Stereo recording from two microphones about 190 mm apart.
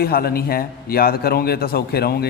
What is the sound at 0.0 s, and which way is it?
A man's voice, 55° left (ahead or behind).